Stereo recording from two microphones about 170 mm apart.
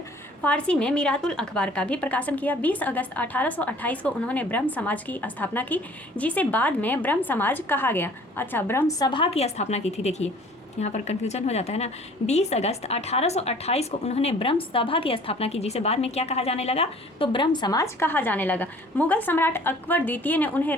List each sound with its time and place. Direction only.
0.4 s a woman's voice: 5° left (ahead or behind)